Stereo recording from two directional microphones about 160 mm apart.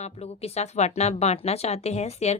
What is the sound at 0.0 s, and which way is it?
Speech, 40° left (ahead or behind).